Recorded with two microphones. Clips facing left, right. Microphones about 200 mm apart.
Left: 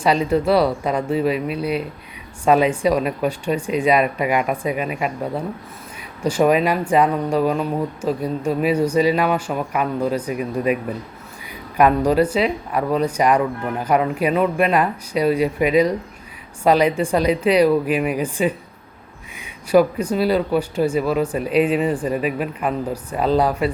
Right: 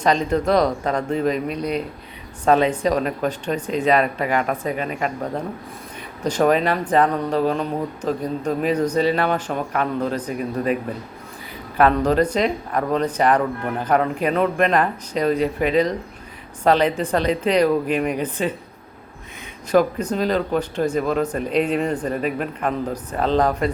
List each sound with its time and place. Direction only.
0.0 s speech: 10° left (ahead or behind)
11.8 s speech: 10° left (ahead or behind)